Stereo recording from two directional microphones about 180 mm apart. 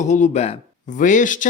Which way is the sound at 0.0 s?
40° left (ahead or behind).